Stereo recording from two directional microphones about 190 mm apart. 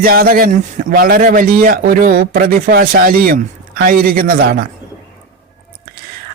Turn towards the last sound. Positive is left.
turn(degrees=-50)  # may be behind; listen again after turning